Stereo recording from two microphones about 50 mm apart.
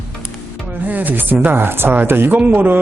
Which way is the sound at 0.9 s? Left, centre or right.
Right.